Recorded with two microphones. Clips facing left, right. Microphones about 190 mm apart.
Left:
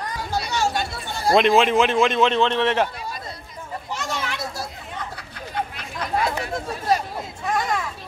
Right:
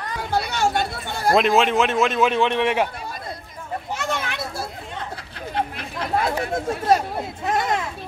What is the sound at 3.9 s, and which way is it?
Children playing, 55° right (ahead or behind).